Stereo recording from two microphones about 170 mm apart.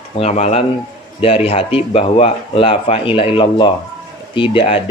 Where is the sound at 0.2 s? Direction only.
40° left (ahead or behind).